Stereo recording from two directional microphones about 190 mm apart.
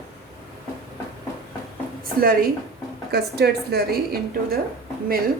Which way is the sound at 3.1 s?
55° right (ahead or behind).